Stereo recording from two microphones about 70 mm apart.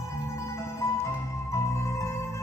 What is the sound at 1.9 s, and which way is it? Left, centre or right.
Music, left.